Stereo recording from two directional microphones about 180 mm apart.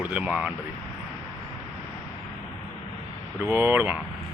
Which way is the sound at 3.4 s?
15° right (ahead or behind).